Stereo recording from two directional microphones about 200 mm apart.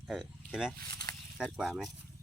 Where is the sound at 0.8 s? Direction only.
15° left (ahead or behind).